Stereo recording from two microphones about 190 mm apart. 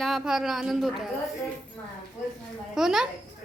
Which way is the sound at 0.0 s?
Centre (ahead or behind).